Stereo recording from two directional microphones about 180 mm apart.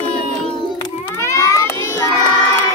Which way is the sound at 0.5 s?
30° left (ahead or behind).